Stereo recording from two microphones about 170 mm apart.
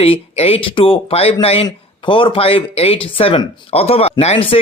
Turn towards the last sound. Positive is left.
turn(degrees=35)  # may be behind; listen again after turning